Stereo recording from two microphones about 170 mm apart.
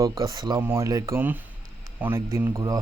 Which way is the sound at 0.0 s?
20° right (ahead or behind).